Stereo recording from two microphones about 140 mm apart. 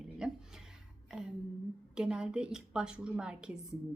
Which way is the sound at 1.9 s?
5° right (ahead or behind).